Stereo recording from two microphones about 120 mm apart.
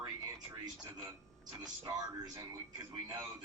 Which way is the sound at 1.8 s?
35° right (ahead or behind).